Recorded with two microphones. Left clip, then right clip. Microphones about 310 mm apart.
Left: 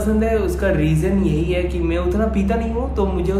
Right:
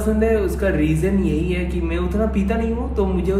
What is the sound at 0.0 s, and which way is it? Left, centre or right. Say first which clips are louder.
A man's voice: even; centre.